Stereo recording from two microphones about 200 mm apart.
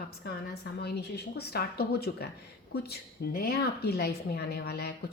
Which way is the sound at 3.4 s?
50° left (ahead or behind).